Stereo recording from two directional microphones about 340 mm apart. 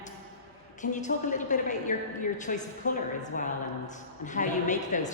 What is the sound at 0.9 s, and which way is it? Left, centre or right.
A man's voice, left.